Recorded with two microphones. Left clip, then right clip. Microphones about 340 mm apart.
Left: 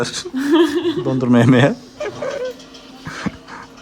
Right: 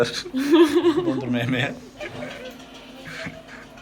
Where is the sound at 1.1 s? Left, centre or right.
Left.